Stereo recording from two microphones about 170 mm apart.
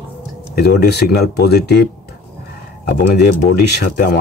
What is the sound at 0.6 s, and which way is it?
Speech, 70° left (ahead or behind).